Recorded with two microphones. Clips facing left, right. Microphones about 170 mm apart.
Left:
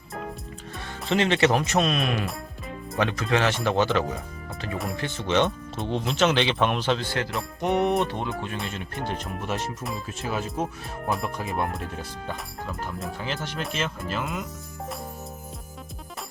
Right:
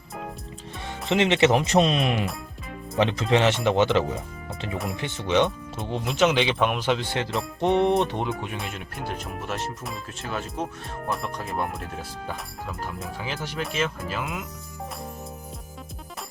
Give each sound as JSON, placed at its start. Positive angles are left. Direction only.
{"t": 1.0, "sound": "speech", "side_deg": -20}
{"t": 8.5, "sound": "speech", "side_deg": 0}